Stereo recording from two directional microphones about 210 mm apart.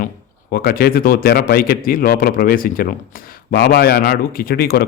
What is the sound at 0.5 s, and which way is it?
A man's voice, 45° left (ahead or behind).